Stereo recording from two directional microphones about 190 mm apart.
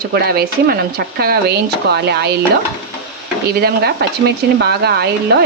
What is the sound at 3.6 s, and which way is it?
Speech, 60° right (ahead or behind).